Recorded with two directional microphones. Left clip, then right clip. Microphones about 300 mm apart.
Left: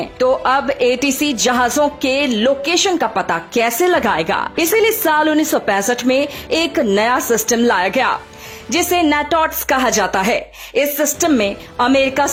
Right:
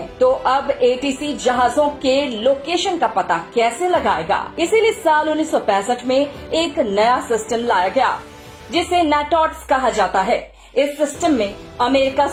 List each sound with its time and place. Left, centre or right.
0.2 s speech: left
11.8 s speech: left